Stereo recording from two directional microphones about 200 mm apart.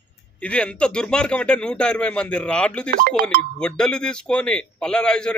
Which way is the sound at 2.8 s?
45° right (ahead or behind).